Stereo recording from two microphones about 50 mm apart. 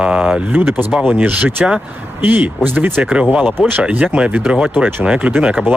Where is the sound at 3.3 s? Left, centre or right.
Right.